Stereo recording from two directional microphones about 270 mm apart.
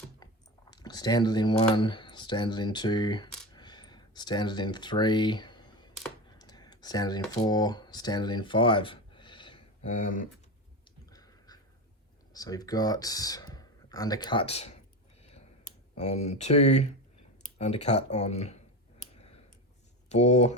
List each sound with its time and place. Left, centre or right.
0.2 s chewing: centre
0.7 s speech: centre
3.5 s a sound: centre
6.4 s speech: centre
11.1 s a sound: centre
12.3 s speech: centre
15.2 s a sound: left
17.4 s speech: left
20.1 s speech: left